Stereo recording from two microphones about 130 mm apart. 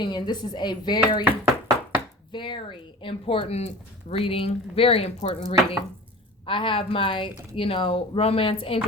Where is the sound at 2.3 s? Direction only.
35° left (ahead or behind).